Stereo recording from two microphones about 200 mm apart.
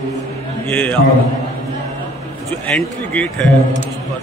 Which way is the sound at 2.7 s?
5° left (ahead or behind).